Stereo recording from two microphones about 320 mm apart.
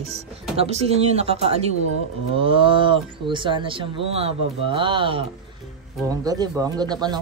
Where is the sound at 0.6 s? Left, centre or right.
Centre.